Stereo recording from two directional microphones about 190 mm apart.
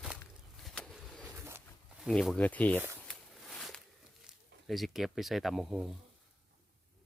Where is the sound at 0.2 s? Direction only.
5° left (ahead or behind).